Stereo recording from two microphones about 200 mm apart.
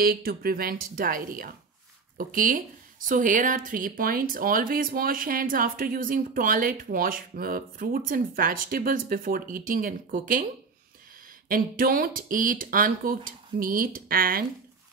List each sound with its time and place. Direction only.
0.0 s a woman's voice: 50° right (ahead or behind)
11.4 s a woman's voice: 45° right (ahead or behind)